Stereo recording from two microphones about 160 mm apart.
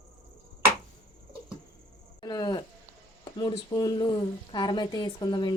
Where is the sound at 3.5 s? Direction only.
30° left (ahead or behind).